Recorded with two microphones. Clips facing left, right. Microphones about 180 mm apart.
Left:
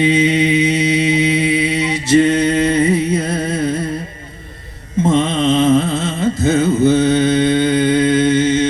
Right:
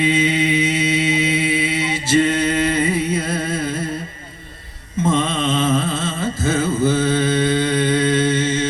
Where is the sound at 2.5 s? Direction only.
25° left (ahead or behind).